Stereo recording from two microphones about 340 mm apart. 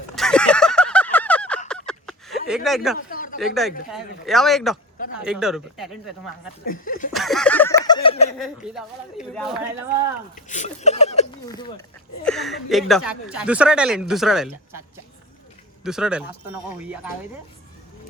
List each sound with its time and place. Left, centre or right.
0.2 s a sound: centre
2.6 s speech: centre
3.1 s a sound: left
3.4 s speech: centre
6.7 s speech: left
7.1 s a sound: centre
8.4 s speech: centre
10.5 s speech: centre
12.2 s speech: centre
15.8 s speech: centre